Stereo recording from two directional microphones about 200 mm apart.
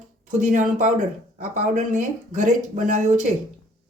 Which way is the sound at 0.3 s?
40° right (ahead or behind).